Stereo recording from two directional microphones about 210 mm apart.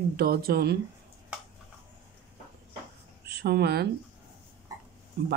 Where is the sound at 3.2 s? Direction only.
50° right (ahead or behind).